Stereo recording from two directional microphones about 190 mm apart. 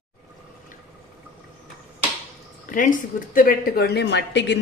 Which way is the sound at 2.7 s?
45° left (ahead or behind).